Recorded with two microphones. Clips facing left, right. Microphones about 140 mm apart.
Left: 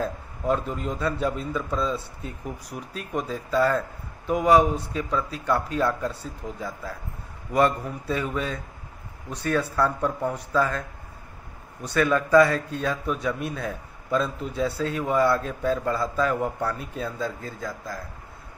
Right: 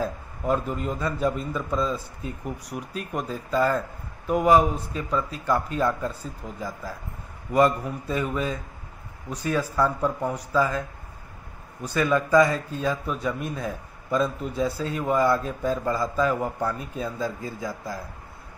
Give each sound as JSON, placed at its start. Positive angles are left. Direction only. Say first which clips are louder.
{"t": 0.0, "sound": "speech", "louder": "even", "side_deg": -5}
{"t": 11.9, "sound": "speech", "louder": "left 1 dB", "side_deg": -5}
{"t": 13.6, "sound": "a man's voice", "louder": "even", "side_deg": -5}
{"t": 17.6, "sound": "speech", "louder": "right 1 dB", "side_deg": -15}